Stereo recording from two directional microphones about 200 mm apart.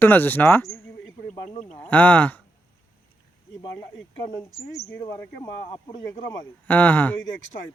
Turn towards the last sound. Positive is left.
turn(degrees=10)  # may be behind; listen again after turning